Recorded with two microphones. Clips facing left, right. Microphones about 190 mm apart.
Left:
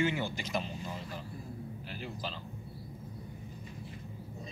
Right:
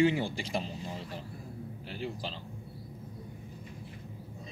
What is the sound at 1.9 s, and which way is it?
Speech, 30° right (ahead or behind).